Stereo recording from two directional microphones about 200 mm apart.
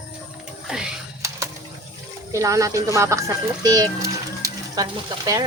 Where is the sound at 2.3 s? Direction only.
15° right (ahead or behind).